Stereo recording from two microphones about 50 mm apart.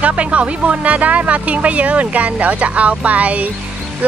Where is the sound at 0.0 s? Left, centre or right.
Right.